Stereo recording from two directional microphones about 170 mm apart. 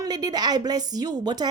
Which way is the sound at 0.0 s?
20° right (ahead or behind).